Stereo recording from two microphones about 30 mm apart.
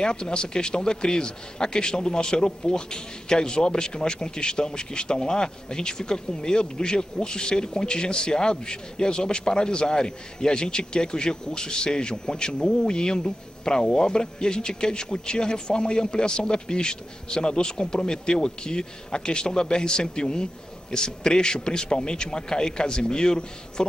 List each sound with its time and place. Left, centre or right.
0.0 s a man's voice: left